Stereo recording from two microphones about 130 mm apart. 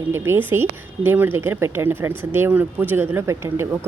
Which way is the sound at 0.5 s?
15° right (ahead or behind).